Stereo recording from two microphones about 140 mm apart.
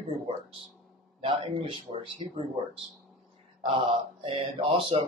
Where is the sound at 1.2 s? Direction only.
40° right (ahead or behind).